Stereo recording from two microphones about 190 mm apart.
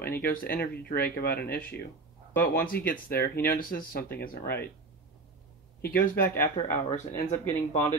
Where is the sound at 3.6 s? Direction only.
50° left (ahead or behind).